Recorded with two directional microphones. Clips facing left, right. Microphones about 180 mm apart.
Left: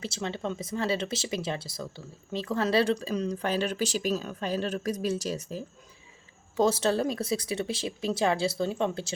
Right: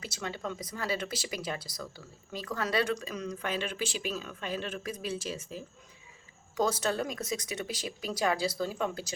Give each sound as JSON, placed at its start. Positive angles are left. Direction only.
{"t": 0.0, "sound": "speech", "side_deg": 30}
{"t": 6.6, "sound": "speech", "side_deg": 25}